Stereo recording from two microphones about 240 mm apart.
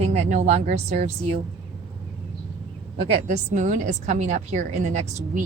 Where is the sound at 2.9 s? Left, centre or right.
Right.